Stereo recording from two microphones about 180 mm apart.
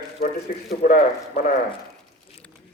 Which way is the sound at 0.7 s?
55° left (ahead or behind).